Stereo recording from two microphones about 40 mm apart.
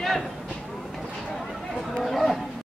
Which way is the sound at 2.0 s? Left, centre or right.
Centre.